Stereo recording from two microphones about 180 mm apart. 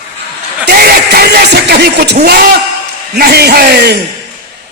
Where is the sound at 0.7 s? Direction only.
55° right (ahead or behind).